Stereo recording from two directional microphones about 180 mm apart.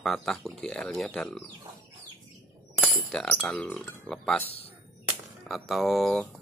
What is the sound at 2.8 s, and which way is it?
Chink, centre (ahead or behind).